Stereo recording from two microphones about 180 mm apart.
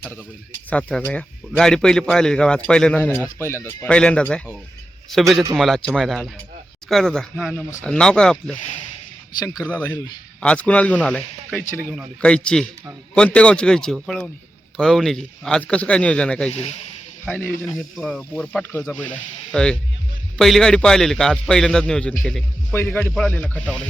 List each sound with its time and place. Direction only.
0.7 s a man's voice: 5° left (ahead or behind)
9.4 s a man's voice: 20° left (ahead or behind); by 16.5 s 5° left (ahead or behind)
16.5 s speech: 35° left (ahead or behind)
17.2 s a man's voice: 5° left (ahead or behind)